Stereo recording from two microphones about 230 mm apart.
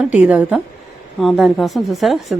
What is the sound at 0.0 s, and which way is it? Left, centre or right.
A woman's voice, centre.